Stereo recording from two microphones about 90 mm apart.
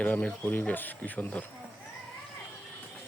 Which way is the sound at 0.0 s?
20° left (ahead or behind).